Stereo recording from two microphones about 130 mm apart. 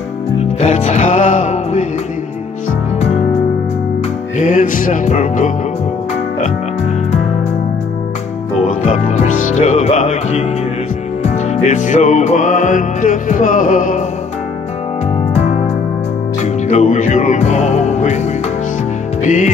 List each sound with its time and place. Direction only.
0.6 s music: 55° left (ahead or behind)
4.4 s music: 80° left
8.6 s music: 70° left (ahead or behind)
15.3 s music: 60° left (ahead or behind)
19.2 s music: 75° left (ahead or behind)